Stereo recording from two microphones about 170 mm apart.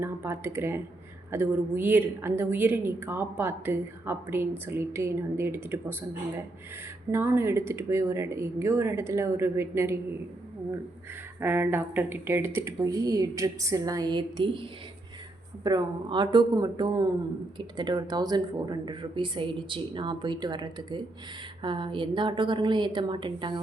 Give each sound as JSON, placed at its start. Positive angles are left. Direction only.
{"t": 0.0, "sound": "a woman's voice", "side_deg": -15}
{"t": 7.1, "sound": "a woman's voice", "side_deg": -15}
{"t": 11.3, "sound": "a woman's voice", "side_deg": -15}
{"t": 15.6, "sound": "a woman's voice", "side_deg": -25}